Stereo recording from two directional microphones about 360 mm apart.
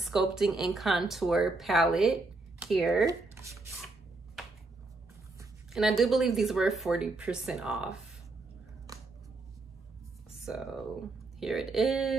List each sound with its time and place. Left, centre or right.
0.0 s speech: centre
2.6 s a sound: centre
5.4 s speech: centre
8.9 s scissors: centre
10.4 s speech: centre